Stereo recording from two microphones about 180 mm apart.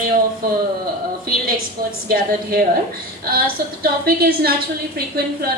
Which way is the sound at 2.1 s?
55° right (ahead or behind).